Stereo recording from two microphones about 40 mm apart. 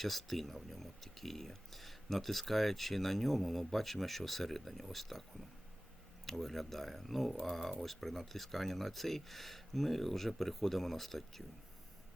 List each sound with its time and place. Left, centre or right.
0.0 s speech: centre
6.2 s speech: centre